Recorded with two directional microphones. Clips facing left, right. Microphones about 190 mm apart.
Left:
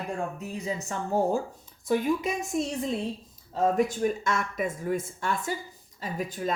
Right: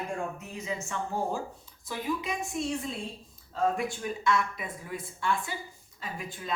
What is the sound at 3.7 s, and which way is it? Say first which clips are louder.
A woman's voice: left 8 dB; 45° left (ahead or behind).